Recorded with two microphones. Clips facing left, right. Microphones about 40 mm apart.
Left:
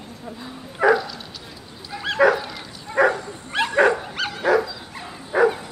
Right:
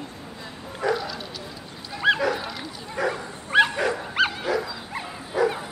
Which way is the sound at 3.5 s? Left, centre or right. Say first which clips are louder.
Left 2 dB; centre.